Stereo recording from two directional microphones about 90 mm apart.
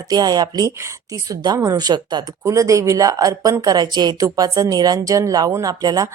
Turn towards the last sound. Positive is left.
turn(degrees=-45)  # may be behind; listen again after turning